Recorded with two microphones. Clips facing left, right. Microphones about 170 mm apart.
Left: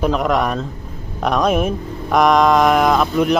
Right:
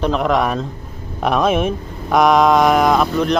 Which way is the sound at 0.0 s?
Centre (ahead or behind).